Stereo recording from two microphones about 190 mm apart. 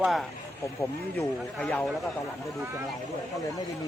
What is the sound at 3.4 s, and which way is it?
Speech, 20° left (ahead or behind).